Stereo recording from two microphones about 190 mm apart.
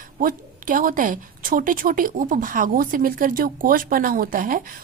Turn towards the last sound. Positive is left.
turn(degrees=-45)  # may be behind; listen again after turning